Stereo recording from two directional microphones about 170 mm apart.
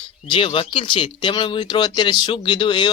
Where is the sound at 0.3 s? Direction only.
30° left (ahead or behind).